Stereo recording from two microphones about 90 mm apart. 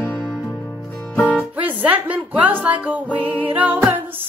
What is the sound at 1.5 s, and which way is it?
Music, 15° right (ahead or behind).